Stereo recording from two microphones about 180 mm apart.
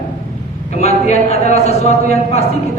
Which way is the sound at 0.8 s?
35° left (ahead or behind).